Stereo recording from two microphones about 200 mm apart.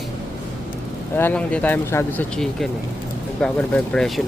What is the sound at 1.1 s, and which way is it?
Speech, 10° left (ahead or behind).